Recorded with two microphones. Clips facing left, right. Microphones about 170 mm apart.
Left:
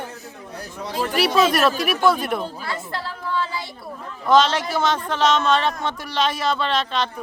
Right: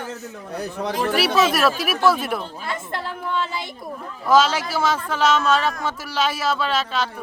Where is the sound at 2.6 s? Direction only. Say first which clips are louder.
Right 1 dB; 20° right (ahead or behind).